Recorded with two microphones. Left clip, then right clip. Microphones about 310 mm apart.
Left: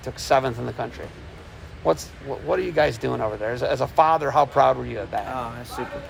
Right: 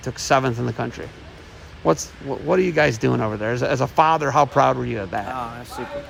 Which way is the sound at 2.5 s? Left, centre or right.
Right.